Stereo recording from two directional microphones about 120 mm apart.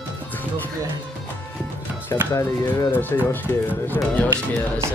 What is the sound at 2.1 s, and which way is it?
Speech, 25° left (ahead or behind).